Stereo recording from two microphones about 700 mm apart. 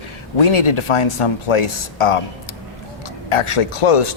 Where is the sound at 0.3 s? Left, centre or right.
Left.